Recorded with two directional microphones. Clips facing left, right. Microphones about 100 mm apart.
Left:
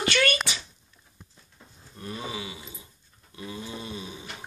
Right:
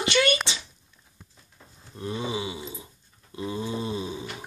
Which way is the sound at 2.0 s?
25° right (ahead or behind).